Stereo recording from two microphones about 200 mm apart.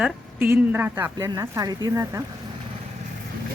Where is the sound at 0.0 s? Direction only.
10° right (ahead or behind).